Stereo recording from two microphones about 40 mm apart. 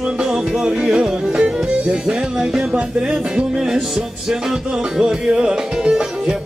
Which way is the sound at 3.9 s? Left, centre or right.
Centre.